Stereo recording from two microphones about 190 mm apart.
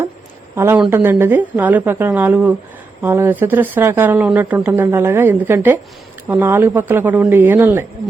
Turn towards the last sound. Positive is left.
turn(degrees=-10)  # may be behind; listen again after turning